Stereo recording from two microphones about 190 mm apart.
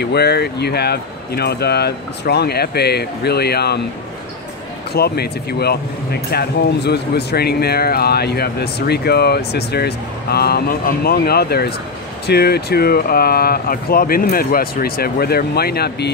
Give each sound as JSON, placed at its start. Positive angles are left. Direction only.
{"t": 0.0, "sound": "speech", "side_deg": 60}
{"t": 4.9, "sound": "speech", "side_deg": 55}